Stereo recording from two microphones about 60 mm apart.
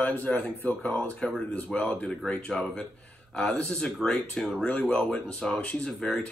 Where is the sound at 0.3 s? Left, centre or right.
Centre.